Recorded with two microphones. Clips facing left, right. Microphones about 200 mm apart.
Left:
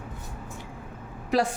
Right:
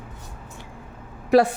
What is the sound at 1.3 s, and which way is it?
Speech, 65° right (ahead or behind).